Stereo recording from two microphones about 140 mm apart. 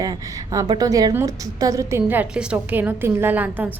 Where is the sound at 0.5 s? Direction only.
25° right (ahead or behind).